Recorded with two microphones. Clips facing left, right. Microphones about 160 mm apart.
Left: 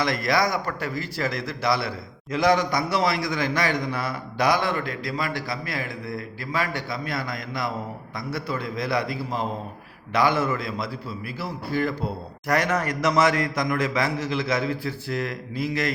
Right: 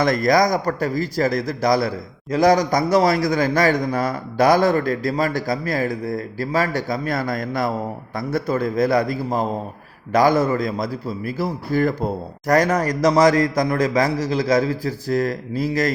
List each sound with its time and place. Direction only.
0.0 s a man's voice: 45° right (ahead or behind)